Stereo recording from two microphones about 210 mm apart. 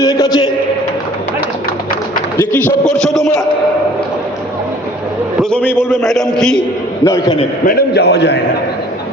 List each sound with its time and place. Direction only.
0.0 s a sound: 15° left (ahead or behind)
2.4 s a man's voice: 10° left (ahead or behind)
5.4 s a sound: 5° left (ahead or behind)
5.8 s a man's voice: centre (ahead or behind)
7.0 s a man's voice: 15° left (ahead or behind)
7.6 s a man's voice: 40° left (ahead or behind)